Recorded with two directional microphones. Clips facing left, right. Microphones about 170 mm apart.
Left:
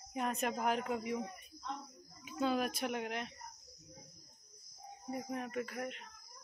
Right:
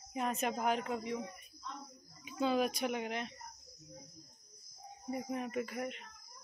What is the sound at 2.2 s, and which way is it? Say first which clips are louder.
Speech: right 2 dB; centre (ahead or behind).